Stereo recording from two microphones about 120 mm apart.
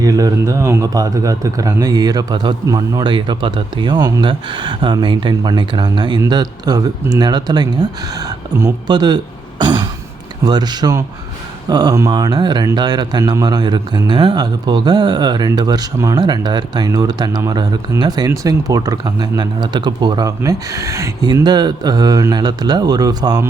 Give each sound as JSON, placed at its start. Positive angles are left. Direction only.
{"t": 0.0, "sound": "speech", "side_deg": -30}
{"t": 21.4, "sound": "speech", "side_deg": -35}